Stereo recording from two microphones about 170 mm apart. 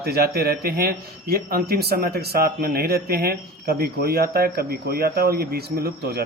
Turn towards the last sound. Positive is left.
turn(degrees=-65)  # may be behind; listen again after turning